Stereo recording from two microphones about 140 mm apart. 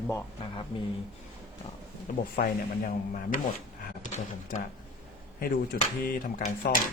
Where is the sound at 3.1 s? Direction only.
70° left (ahead or behind).